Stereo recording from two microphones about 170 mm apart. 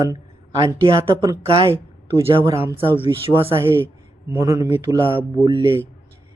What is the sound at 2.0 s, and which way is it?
Speech, 15° right (ahead or behind).